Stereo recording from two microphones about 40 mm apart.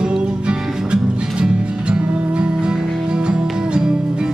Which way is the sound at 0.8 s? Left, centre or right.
Right.